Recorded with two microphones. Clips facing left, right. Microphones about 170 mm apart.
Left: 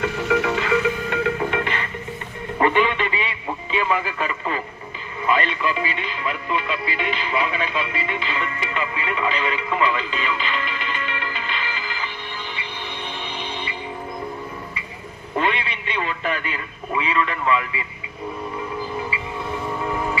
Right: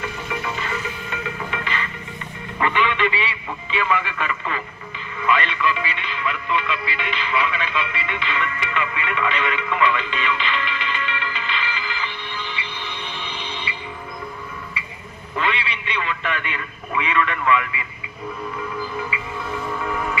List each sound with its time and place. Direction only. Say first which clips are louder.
0.3 s music: left 9 dB; 80° left
1.4 s music: left 5 dB; 55° left (ahead or behind)
2.6 s radio: left 2 dB; 40° left (ahead or behind)
5.2 s music: even; 40° left (ahead or behind)
15.3 s a man's voice: left 2 dB; 45° left (ahead or behind); by 17.8 s 30° left (ahead or behind)
19.6 s music: left 1 dB; 25° left (ahead or behind)